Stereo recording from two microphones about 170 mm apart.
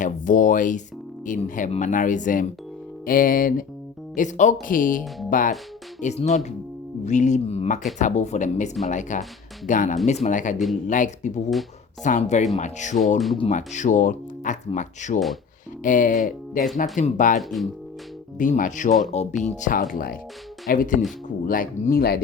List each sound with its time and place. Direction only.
0.0 s speech: 50° left (ahead or behind)
13.1 s speech: centre (ahead or behind)
13.5 s speech: 45° left (ahead or behind); by 22.2 s 60° left (ahead or behind)